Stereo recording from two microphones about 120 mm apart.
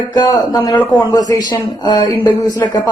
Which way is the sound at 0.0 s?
35° left (ahead or behind).